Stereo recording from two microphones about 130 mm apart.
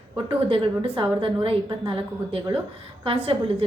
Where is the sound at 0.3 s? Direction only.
45° right (ahead or behind).